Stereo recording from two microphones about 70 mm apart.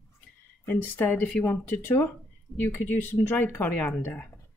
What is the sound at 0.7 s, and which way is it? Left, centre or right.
Speech, left.